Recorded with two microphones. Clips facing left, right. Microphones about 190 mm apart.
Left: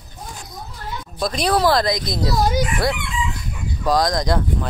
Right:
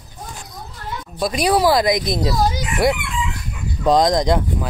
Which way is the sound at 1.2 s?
10° right (ahead or behind).